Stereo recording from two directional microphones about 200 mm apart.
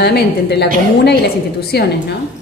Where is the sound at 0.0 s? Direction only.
55° left (ahead or behind).